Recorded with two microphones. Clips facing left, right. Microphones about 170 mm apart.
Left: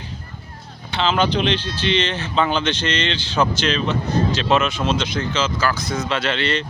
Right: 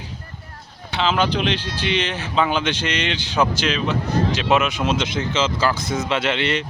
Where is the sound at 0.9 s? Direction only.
5° right (ahead or behind).